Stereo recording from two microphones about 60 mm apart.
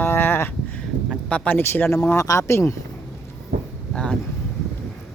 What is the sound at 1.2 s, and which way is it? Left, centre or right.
Speech, left.